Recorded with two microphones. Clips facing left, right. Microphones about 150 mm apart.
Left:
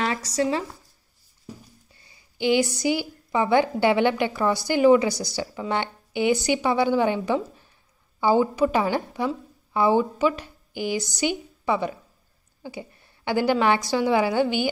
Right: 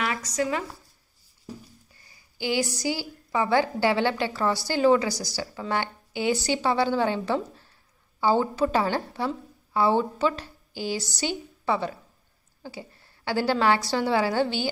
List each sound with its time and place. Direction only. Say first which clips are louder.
0.0 s speech: left 3 dB; 30° left (ahead or behind)
2.0 s a woman's voice: left 5 dB; 25° left (ahead or behind)